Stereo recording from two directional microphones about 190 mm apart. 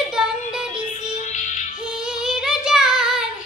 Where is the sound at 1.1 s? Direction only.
40° left (ahead or behind).